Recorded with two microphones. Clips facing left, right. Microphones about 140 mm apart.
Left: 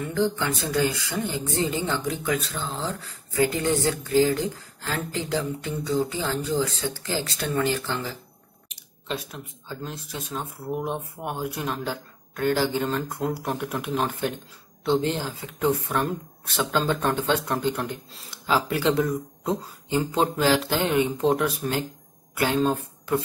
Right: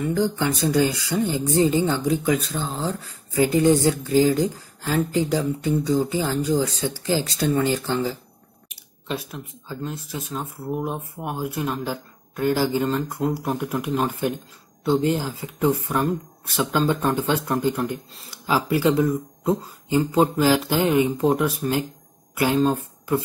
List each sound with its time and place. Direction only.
0.1 s speech: 15° right (ahead or behind)
8.6 s speech: 5° right (ahead or behind)